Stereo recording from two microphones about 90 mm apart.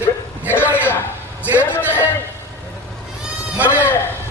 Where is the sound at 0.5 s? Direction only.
20° left (ahead or behind).